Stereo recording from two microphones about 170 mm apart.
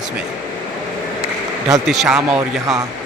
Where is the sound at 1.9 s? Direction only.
Centre (ahead or behind).